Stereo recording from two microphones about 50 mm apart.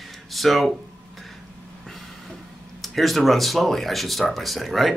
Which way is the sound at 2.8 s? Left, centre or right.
Centre.